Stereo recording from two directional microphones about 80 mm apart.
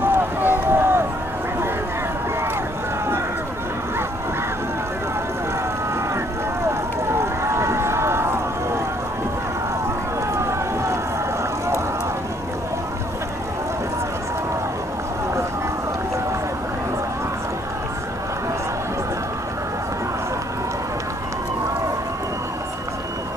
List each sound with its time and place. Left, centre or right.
0.0 s boat: right
6.6 s vehicle: right
10.3 s run: right